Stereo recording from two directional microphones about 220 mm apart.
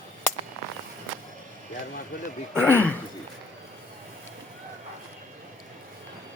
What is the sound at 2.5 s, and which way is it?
Speech, 10° left (ahead or behind).